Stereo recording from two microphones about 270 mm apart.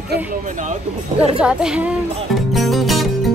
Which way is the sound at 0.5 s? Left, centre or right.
Right.